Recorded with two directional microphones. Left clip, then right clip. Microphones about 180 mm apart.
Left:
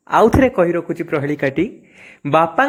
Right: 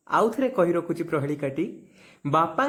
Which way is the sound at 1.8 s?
15° left (ahead or behind).